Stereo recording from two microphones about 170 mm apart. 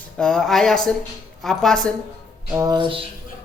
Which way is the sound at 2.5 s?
25° right (ahead or behind).